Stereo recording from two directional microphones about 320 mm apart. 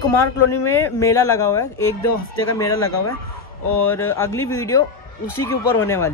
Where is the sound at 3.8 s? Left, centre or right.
Centre.